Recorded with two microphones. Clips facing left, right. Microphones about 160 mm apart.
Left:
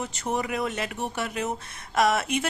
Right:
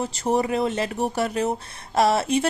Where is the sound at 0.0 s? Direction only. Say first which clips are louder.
Right 6 dB; 35° right (ahead or behind).